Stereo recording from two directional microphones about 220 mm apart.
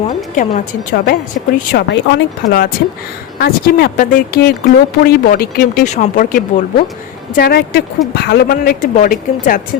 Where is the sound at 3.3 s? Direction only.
45° left (ahead or behind).